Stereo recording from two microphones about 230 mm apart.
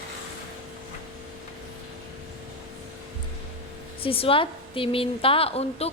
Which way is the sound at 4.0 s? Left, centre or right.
Left.